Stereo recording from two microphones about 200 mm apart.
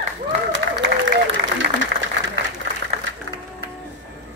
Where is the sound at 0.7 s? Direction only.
60° right (ahead or behind).